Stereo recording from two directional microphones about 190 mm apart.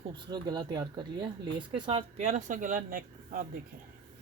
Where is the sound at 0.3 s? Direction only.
20° right (ahead or behind); by 3.4 s 45° right (ahead or behind).